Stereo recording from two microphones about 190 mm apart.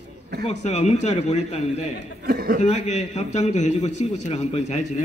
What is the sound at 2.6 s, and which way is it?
A man's voice, 40° left (ahead or behind).